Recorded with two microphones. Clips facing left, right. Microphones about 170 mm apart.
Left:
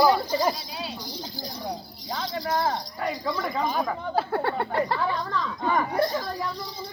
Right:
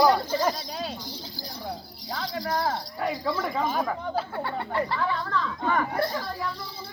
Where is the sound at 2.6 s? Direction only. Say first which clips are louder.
Left 2 dB; 20° left (ahead or behind).